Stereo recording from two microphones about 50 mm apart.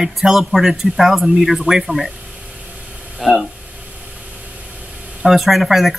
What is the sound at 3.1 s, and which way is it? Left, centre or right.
Speech, centre.